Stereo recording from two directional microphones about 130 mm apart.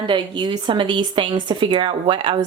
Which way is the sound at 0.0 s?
40° right (ahead or behind).